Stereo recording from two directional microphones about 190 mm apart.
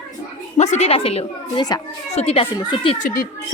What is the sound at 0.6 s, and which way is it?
Speech, 35° left (ahead or behind).